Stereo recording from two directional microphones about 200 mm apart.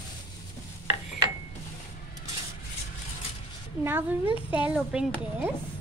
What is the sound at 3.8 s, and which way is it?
Speech, 10° right (ahead or behind).